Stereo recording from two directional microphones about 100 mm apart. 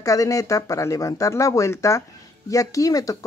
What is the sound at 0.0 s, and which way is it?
Speech, 35° left (ahead or behind).